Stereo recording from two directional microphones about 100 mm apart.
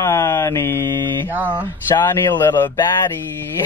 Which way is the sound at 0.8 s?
50° right (ahead or behind).